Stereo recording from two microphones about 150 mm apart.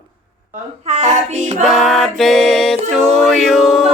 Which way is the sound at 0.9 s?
50° right (ahead or behind).